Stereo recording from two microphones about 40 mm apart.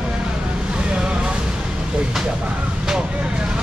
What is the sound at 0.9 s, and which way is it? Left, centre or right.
Vehicle, right.